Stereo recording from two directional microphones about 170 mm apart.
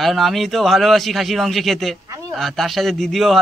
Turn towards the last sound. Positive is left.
turn(degrees=0)  # may be behind; listen again after turning